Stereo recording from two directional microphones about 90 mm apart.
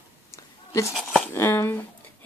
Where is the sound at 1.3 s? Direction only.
25° left (ahead or behind).